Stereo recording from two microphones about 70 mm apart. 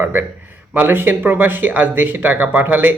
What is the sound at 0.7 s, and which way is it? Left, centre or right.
Speech, right.